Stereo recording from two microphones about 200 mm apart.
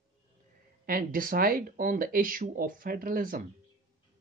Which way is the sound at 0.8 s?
45° right (ahead or behind).